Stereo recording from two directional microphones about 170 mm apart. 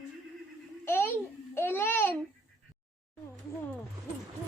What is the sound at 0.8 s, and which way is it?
Babbling, 15° left (ahead or behind).